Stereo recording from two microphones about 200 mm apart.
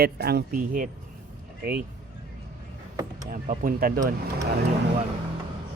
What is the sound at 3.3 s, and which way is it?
Speech, 45° right (ahead or behind).